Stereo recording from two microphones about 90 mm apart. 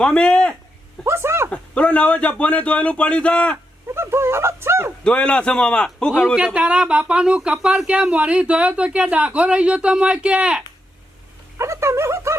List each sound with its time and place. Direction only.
0.0 s speech: 10° left (ahead or behind)
1.0 s a sound: 30° right (ahead or behind)
1.5 s speech: 15° left (ahead or behind)
3.9 s speech: 30° right (ahead or behind)
5.0 s speech: 10° left (ahead or behind)
6.3 s speech: 10° right (ahead or behind)
11.5 s a sound: 35° right (ahead or behind)